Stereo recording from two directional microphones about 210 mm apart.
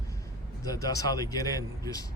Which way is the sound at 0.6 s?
15° left (ahead or behind).